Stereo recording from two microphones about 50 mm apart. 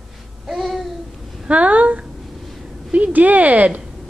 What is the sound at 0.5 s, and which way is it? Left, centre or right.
Babbling, centre.